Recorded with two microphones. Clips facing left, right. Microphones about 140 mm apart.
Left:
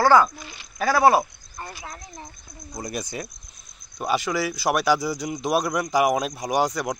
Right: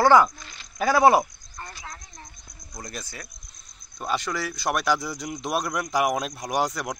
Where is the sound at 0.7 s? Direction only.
15° right (ahead or behind).